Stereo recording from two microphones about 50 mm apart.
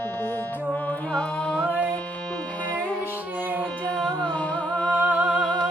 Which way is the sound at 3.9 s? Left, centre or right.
Centre.